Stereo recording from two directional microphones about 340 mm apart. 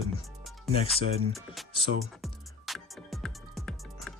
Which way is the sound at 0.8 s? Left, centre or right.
Centre.